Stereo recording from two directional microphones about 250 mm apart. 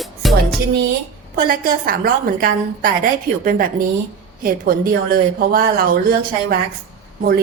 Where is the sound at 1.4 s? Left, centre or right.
Right.